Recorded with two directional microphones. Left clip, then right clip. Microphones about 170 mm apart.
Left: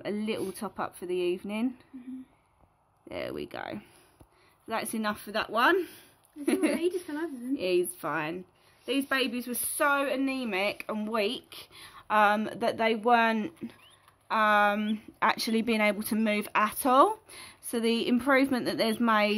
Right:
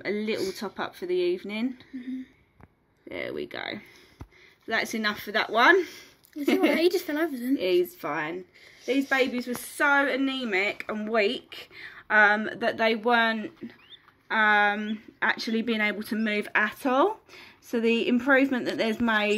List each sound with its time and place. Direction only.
0.0 s speech: 30° left (ahead or behind)
3.1 s speech: 35° left (ahead or behind)
6.8 s speech: 20° right (ahead or behind)
7.5 s speech: 30° left (ahead or behind); by 9.8 s 50° left (ahead or behind)
9.8 s speech: 35° left (ahead or behind)